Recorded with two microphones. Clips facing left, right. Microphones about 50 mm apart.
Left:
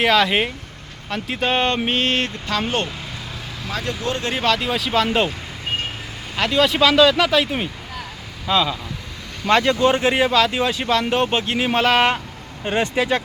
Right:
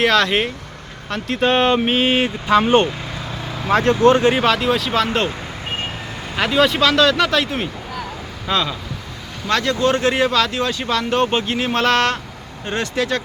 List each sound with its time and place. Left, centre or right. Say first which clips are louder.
0.0 s speech: right 1 dB; centre; by 2.9 s right
3.6 s speech: right 12 dB; right
4.2 s speech: right 8 dB; right
4.4 s speech: right 3 dB; centre
6.3 s speech: right 2 dB; centre
9.5 s speech: left 2 dB; left
9.9 s speech: even; centre